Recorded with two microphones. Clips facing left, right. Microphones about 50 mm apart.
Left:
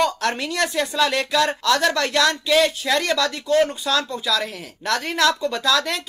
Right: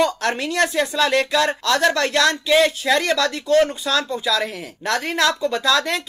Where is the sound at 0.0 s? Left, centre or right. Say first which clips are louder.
Right 1 dB; centre.